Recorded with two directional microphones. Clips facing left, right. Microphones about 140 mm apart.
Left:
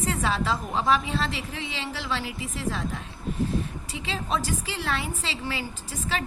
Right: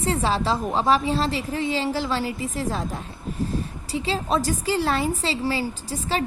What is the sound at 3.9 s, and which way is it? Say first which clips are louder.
A woman's voice: right 7 dB; 35° right (ahead or behind).